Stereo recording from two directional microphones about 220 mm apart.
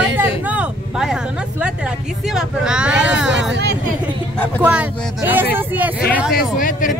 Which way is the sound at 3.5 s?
50° right (ahead or behind).